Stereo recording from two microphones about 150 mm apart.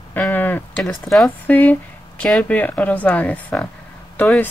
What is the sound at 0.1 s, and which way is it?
Speech, 10° left (ahead or behind).